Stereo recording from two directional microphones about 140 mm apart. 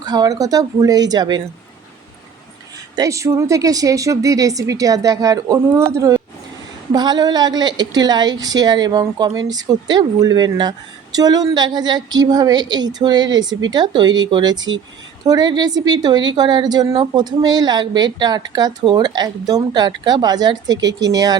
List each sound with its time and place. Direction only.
0.0 s a woman's voice: 25° right (ahead or behind)
2.9 s a woman's voice: 25° right (ahead or behind)